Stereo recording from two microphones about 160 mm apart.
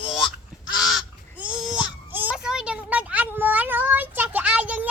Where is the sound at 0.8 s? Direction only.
Centre (ahead or behind).